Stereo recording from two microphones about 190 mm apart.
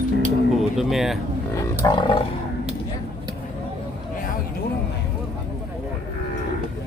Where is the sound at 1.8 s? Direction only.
25° left (ahead or behind).